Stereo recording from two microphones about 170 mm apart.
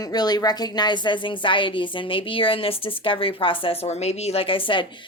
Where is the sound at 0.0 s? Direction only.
25° left (ahead or behind).